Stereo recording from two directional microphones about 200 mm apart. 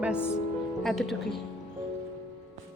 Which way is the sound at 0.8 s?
Centre (ahead or behind).